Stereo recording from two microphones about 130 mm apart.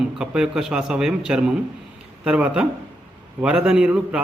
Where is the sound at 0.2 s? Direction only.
5° right (ahead or behind).